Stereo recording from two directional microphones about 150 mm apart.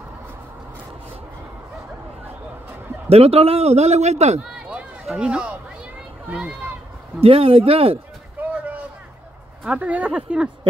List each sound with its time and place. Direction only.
3.1 s a man's voice: 40° right (ahead or behind)
4.6 s a sound: 5° right (ahead or behind)
6.2 s speech: 5° right (ahead or behind)
7.2 s speech: 40° right (ahead or behind)
8.4 s a sound: 10° right (ahead or behind)
9.7 s a woman's voice: 10° right (ahead or behind)